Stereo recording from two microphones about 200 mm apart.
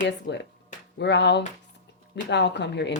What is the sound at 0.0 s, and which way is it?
Speech, 60° left (ahead or behind).